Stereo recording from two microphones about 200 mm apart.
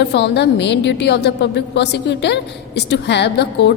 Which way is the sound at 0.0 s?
55° left (ahead or behind).